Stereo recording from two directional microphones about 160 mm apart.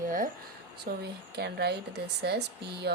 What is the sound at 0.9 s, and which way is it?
Speech, 85° right.